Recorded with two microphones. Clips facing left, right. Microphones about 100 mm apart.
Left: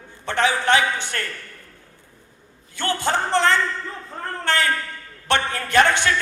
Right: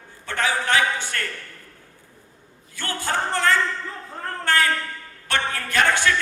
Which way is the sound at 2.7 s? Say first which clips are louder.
Left 4 dB; 20° left (ahead or behind).